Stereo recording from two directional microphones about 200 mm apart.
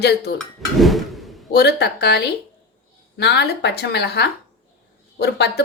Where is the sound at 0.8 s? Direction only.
Centre (ahead or behind).